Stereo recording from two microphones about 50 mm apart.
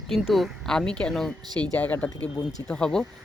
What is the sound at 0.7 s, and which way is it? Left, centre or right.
Speech, centre.